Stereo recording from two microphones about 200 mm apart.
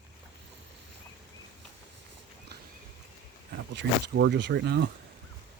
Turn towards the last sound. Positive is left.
turn(degrees=-55)  # may be behind; listen again after turning